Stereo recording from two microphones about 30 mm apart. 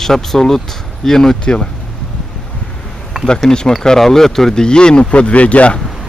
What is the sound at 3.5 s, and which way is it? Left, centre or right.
Speech, left.